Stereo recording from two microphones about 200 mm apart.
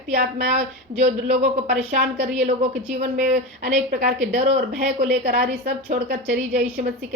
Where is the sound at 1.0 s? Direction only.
35° right (ahead or behind).